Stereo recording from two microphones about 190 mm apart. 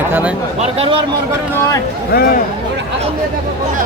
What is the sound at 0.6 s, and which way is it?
Speech, 30° right (ahead or behind).